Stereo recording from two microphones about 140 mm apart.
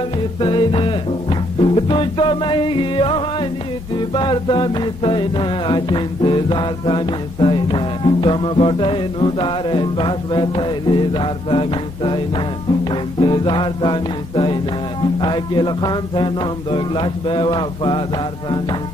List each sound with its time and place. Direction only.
0.4 s music: 35° left (ahead or behind)
13.2 s music: 35° left (ahead or behind)